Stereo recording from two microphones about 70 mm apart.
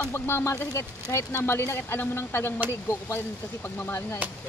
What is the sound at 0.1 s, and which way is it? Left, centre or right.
Speech, left.